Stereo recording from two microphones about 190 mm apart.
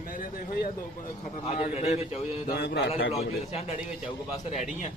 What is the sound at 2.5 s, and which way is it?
Speech, 60° left (ahead or behind).